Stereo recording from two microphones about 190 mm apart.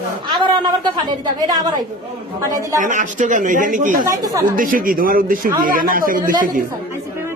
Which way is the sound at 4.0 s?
20° right (ahead or behind).